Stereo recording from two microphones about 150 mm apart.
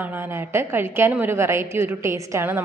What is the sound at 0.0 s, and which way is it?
A woman's voice, 15° right (ahead or behind).